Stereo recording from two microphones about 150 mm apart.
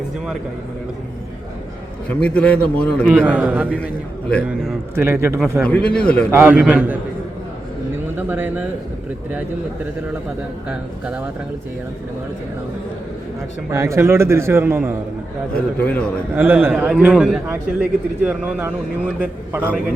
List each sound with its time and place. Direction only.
2.0 s a man's voice: 5° left (ahead or behind)
3.1 s a man's voice: 10° right (ahead or behind)
4.9 s a man's voice: 15° right (ahead or behind)
5.4 s a man's voice: 5° left (ahead or behind)
6.3 s a man's voice: 10° right (ahead or behind)
8.1 s a man's voice: 15° right (ahead or behind)
10.7 s a man's voice: 5° right (ahead or behind)
13.7 s a man's voice: 20° right (ahead or behind)
15.5 s a man's voice: 10° left (ahead or behind)
16.3 s a man's voice: 15° right (ahead or behind)